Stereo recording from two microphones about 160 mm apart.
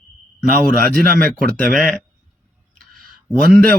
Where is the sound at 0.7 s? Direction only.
70° right (ahead or behind).